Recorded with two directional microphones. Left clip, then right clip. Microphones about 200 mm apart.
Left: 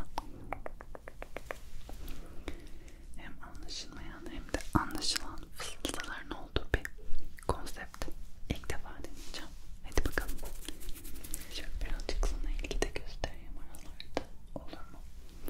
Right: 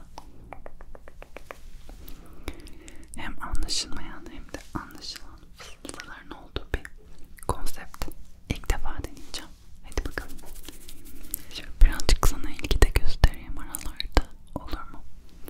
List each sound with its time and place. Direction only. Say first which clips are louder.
0.1 s a sound: left 2 dB; 15° left (ahead or behind)
2.5 s a sound: right 6 dB; 15° right (ahead or behind)
2.8 s whispering: right 13 dB; 45° right (ahead or behind)
4.5 s whispering: left 4 dB; 15° left (ahead or behind)
4.8 s whispering: left 4 dB; 30° left (ahead or behind)
5.6 s whispering: left 2 dB; 20° left (ahead or behind)
5.9 s whispering: even; 5° left (ahead or behind); by 8.6 s 15° right (ahead or behind)
8.6 s whispering: right 9 dB; 35° right (ahead or behind)
9.3 s whispering: right 7 dB; 25° right (ahead or behind)
9.8 s whispering: right 1 dB; centre (ahead or behind)
11.3 s whispering: right 5 dB; 15° right (ahead or behind)
11.8 s whispering: right 16 dB; 45° right (ahead or behind)